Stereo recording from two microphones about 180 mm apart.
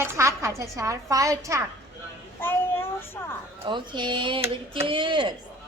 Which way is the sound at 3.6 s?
25° right (ahead or behind).